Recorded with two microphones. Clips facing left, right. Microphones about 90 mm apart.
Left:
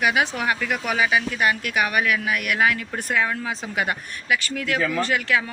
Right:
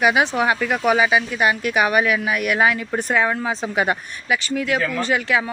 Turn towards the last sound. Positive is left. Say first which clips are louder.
# right 2 dB
turn(degrees=-20)  # may be behind; listen again after turning